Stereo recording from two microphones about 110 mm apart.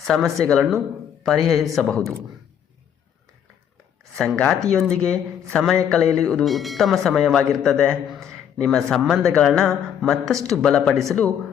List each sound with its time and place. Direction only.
0.1 s speech: 5° left (ahead or behind)
4.4 s speech: 5° left (ahead or behind)